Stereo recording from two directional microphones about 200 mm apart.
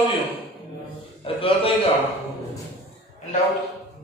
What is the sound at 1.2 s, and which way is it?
Speech, 25° left (ahead or behind).